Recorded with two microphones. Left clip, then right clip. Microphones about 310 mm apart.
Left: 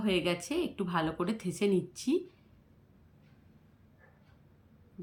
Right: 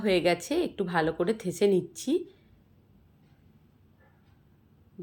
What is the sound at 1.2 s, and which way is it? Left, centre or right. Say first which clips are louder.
Speech: right 7 dB; centre.